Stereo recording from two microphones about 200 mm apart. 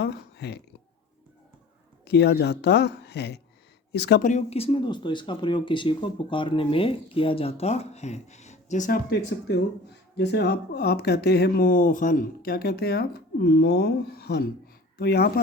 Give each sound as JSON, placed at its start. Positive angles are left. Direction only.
{"t": 0.0, "sound": "speech", "side_deg": 55}
{"t": 2.0, "sound": "speech", "side_deg": 55}
{"t": 4.2, "sound": "speech", "side_deg": 35}
{"t": 10.2, "sound": "speech", "side_deg": 55}